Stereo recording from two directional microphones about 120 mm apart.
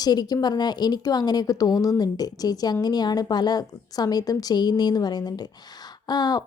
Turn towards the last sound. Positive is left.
turn(degrees=35)  # may be behind; listen again after turning